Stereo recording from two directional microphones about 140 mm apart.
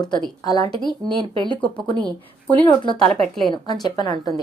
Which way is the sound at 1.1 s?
35° right (ahead or behind).